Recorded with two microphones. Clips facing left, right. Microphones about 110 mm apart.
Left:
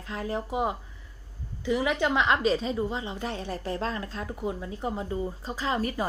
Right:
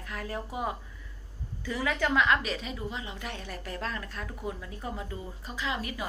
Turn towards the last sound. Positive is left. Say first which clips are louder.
# left 6 dB
turn(degrees=40)  # may be behind; listen again after turning